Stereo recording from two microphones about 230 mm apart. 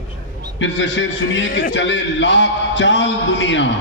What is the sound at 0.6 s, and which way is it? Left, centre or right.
A man's voice, left.